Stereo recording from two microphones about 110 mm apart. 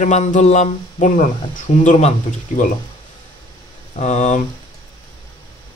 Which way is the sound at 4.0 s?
90° left.